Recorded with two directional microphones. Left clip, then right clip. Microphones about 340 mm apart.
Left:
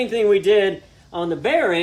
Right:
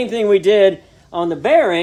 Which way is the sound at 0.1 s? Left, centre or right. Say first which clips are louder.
Right 3 dB; right.